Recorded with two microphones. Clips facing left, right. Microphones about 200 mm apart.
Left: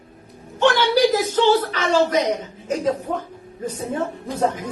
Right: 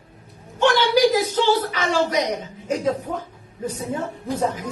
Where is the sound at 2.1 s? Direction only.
45° left (ahead or behind).